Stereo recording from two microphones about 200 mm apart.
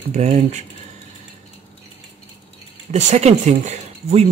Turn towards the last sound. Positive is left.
turn(degrees=-35)  # may be behind; listen again after turning